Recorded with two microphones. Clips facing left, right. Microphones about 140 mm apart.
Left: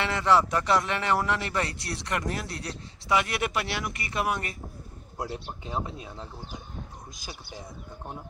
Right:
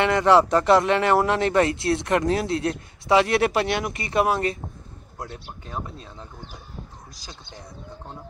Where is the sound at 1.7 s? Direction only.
20° right (ahead or behind).